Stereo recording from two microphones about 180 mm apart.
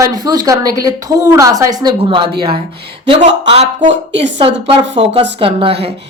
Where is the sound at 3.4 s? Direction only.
30° right (ahead or behind).